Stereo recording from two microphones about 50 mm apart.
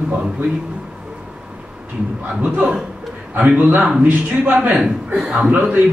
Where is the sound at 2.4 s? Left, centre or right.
Right.